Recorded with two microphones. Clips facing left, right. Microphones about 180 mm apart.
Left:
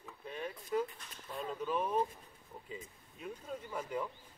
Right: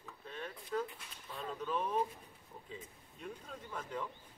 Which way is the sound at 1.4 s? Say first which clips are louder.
Left 2 dB; 10° left (ahead or behind).